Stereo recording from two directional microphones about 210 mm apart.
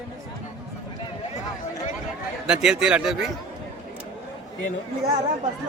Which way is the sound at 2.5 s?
5° right (ahead or behind).